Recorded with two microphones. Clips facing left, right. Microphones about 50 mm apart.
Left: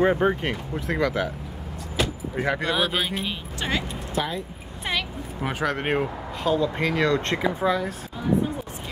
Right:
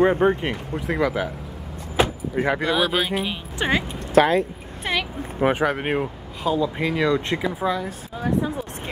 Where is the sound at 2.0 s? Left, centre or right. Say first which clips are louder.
Right 5 dB; right.